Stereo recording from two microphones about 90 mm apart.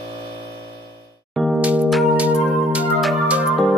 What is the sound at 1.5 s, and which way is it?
Music, 15° right (ahead or behind).